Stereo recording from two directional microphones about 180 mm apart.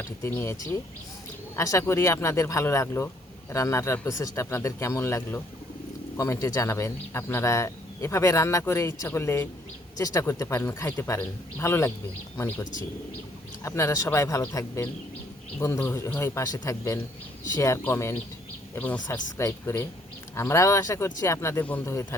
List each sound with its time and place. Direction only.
0.0 s speech: 10° left (ahead or behind)
13.7 s speech: 15° left (ahead or behind)